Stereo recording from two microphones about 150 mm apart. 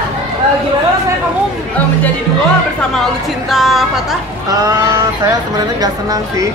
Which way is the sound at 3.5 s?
Centre (ahead or behind).